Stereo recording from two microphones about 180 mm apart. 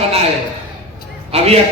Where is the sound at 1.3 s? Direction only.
35° right (ahead or behind).